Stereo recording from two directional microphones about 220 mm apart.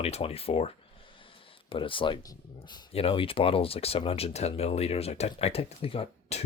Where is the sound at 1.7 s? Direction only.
25° left (ahead or behind).